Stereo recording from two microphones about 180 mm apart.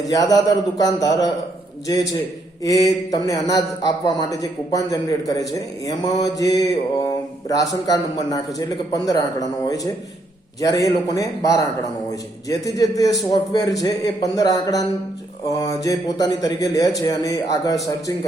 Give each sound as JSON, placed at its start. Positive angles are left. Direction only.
{"t": 0.1, "sound": "mantra", "side_deg": 20}
{"t": 2.6, "sound": "mantra", "side_deg": 20}